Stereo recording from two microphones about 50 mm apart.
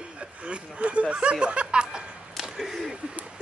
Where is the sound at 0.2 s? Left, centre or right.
Right.